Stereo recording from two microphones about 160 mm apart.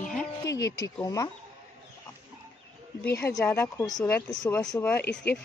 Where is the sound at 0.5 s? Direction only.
20° left (ahead or behind).